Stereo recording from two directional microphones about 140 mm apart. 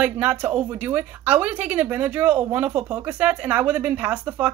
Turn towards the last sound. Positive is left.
turn(degrees=-10)  # may be behind; listen again after turning